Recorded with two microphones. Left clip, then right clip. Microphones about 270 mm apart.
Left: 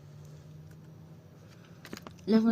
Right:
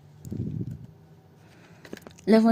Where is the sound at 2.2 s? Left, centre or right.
Right.